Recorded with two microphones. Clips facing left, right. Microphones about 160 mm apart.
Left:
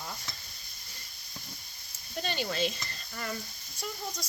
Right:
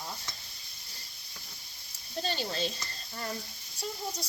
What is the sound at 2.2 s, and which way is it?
Speech, 35° right (ahead or behind).